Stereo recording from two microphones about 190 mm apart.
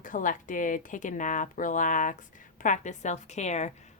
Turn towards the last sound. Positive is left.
turn(degrees=35)  # may be behind; listen again after turning